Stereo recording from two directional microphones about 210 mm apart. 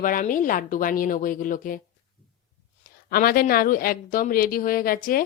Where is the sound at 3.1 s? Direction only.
45° left (ahead or behind).